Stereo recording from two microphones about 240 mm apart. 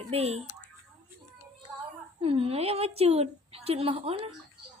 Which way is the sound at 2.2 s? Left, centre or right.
Right.